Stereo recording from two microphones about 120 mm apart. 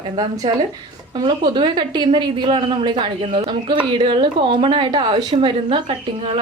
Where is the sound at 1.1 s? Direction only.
40° right (ahead or behind).